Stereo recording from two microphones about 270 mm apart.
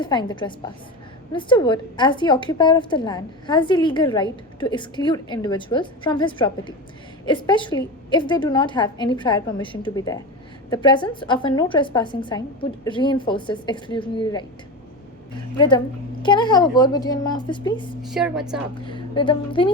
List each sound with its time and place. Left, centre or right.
0.0 s a woman's voice: centre
15.5 s a woman's voice: centre
18.1 s a woman's voice: centre
18.7 s speech: centre